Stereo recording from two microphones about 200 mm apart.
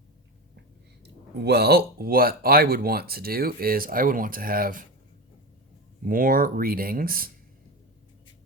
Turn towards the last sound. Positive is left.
turn(degrees=-45)  # may be behind; listen again after turning